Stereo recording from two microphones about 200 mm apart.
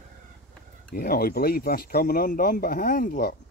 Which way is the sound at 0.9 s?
50° left (ahead or behind).